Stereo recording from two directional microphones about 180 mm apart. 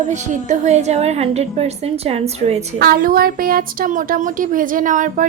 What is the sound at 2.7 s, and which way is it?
A woman's voice, 60° right (ahead or behind).